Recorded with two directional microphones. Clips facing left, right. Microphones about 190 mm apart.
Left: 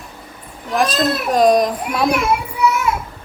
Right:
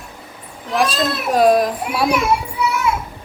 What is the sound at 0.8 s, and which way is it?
A woman's voice, 10° right (ahead or behind).